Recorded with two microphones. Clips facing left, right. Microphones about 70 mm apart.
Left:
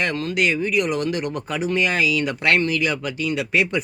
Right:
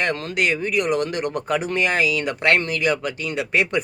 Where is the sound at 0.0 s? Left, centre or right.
Right.